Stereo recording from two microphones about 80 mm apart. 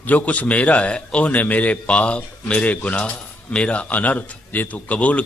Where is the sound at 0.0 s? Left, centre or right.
Centre.